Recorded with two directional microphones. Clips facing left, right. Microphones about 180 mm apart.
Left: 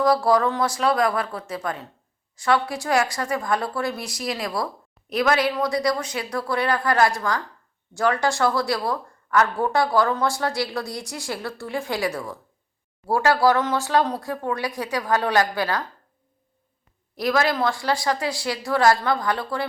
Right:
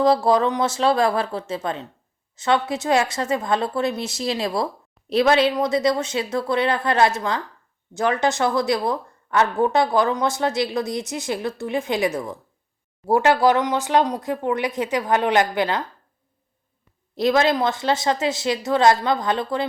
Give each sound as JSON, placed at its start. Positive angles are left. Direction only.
{"t": 0.0, "sound": "speech", "side_deg": -25}
{"t": 17.2, "sound": "speech", "side_deg": -25}